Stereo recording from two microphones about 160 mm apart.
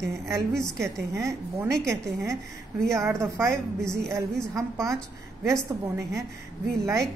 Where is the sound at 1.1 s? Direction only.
20° right (ahead or behind).